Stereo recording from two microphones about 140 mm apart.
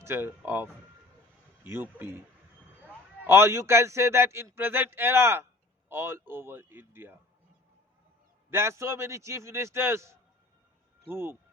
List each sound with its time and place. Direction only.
0.0 s speech: 15° right (ahead or behind)
3.2 s a man's voice: 20° right (ahead or behind)
8.4 s a man's voice: 20° right (ahead or behind)